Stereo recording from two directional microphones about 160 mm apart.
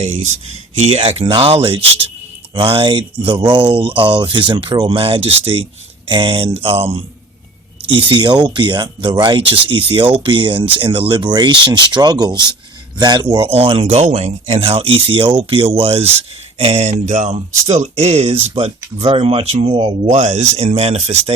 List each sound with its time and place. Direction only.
0.0 s speech: 45° right (ahead or behind)
8.1 s speech: 30° right (ahead or behind)
20.1 s speech: 45° right (ahead or behind)